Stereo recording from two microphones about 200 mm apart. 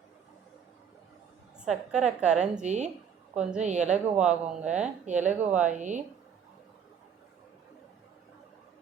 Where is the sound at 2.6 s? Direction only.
35° right (ahead or behind).